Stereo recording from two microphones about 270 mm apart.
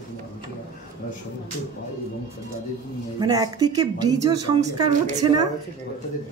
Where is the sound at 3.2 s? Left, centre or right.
Centre.